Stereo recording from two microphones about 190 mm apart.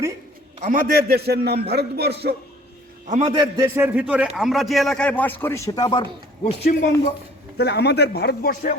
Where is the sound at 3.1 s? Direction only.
35° right (ahead or behind).